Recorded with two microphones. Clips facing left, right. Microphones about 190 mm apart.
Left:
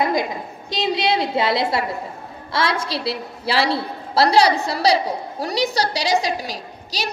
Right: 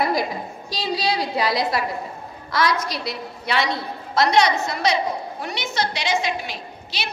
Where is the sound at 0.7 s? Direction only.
20° left (ahead or behind).